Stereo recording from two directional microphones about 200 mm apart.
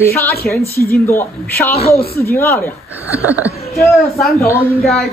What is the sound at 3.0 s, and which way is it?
Speech, 10° right (ahead or behind).